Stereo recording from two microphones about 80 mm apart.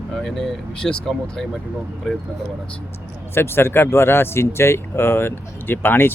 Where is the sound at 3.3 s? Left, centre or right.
Left.